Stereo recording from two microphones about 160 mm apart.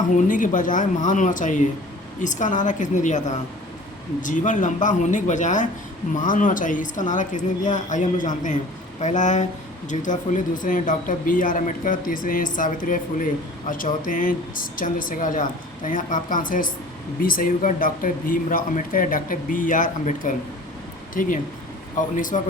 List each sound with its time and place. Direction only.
0.3 s speech: 55° left (ahead or behind)